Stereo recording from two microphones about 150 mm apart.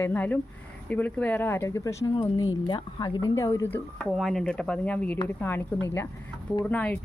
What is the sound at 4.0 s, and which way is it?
Speech, centre (ahead or behind).